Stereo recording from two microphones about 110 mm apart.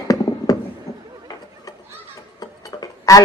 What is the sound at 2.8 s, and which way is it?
Tick-tock, 35° left (ahead or behind).